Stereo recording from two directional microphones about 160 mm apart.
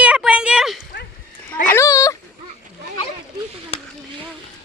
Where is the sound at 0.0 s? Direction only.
5° right (ahead or behind).